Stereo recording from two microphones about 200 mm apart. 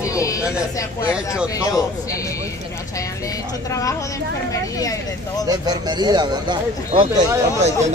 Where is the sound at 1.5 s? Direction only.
15° left (ahead or behind).